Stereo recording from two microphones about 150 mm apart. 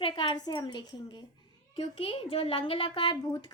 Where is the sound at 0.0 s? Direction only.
30° left (ahead or behind).